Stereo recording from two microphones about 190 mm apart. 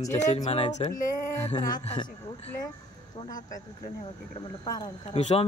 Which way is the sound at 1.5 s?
20° left (ahead or behind).